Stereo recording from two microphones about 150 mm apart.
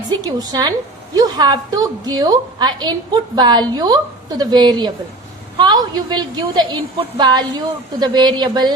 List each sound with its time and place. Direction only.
0.1 s a woman's voice: 25° right (ahead or behind)